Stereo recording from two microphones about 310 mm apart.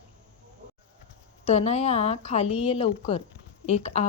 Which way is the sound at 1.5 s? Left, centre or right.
Left.